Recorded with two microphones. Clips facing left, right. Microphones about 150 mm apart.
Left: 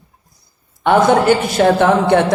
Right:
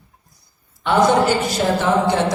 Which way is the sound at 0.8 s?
60° left (ahead or behind).